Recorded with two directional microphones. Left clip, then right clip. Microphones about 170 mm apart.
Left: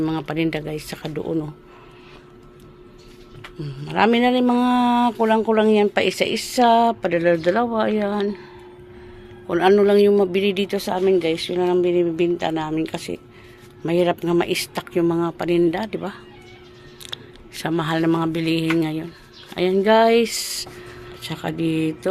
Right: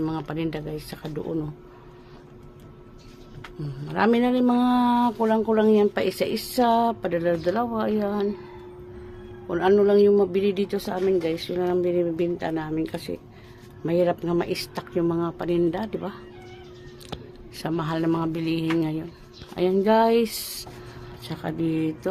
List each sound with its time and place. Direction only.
0.0 s a man's voice: 10° left (ahead or behind)
3.6 s speech: 5° left (ahead or behind)
5.1 s a man's voice: 15° left (ahead or behind)
9.5 s a man's voice: 20° left (ahead or behind)